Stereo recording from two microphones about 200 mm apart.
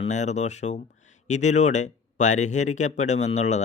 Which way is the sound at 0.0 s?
35° left (ahead or behind).